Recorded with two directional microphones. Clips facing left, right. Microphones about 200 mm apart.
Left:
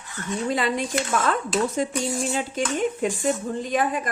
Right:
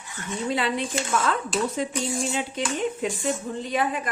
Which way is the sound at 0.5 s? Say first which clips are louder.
Left 1 dB; 45° left (ahead or behind).